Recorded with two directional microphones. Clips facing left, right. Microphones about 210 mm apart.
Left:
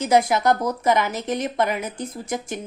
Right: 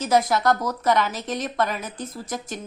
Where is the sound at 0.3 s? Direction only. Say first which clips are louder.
Left 2 dB; 15° left (ahead or behind).